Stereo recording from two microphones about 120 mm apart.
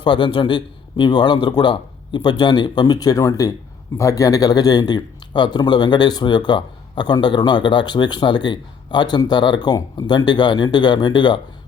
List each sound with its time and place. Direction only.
0.0 s a man's voice: 45° left (ahead or behind)